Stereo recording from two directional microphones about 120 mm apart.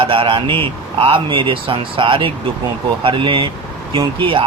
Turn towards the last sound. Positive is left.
turn(degrees=-45)  # may be behind; listen again after turning